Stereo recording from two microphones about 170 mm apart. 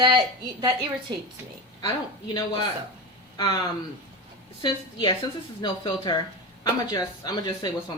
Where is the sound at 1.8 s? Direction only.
20° left (ahead or behind).